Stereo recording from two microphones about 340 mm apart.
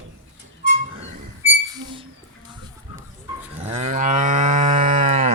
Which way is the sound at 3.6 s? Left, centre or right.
Centre.